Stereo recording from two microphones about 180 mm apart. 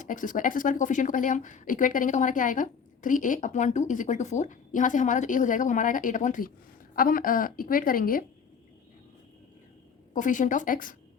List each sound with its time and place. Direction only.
0.0 s speech: 45° left (ahead or behind)
10.2 s speech: 45° left (ahead or behind)